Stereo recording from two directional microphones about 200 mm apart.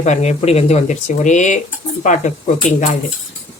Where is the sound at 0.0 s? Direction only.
35° left (ahead or behind).